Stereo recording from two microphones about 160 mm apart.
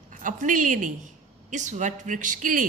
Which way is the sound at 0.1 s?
55° right (ahead or behind).